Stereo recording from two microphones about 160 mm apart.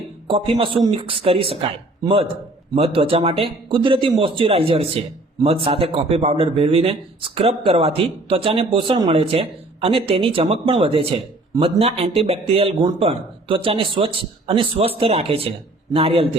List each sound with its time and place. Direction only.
0.3 s a man's voice: 35° right (ahead or behind)